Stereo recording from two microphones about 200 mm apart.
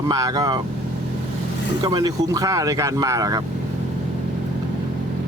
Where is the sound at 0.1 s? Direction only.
20° right (ahead or behind).